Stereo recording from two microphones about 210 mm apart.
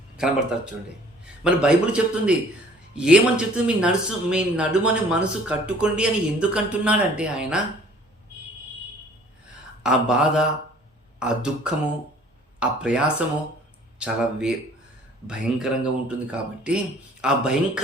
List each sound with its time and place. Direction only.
0.2 s speech: 5° right (ahead or behind)
9.8 s speech: 5° right (ahead or behind)